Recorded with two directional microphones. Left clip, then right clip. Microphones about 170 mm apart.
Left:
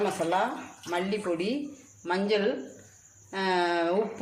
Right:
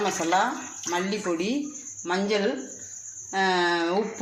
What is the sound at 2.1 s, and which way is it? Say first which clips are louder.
Speech: right 1 dB; centre (ahead or behind).